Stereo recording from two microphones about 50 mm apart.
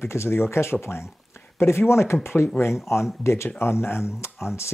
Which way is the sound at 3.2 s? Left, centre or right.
Left.